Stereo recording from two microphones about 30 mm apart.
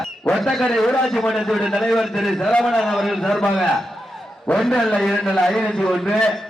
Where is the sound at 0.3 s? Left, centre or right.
Centre.